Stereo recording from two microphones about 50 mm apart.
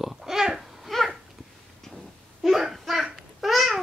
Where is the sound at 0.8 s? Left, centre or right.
Centre.